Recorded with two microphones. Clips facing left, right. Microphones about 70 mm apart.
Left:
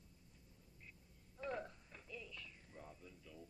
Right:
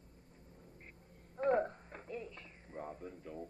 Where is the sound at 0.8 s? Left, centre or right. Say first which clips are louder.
Right 6 dB; right.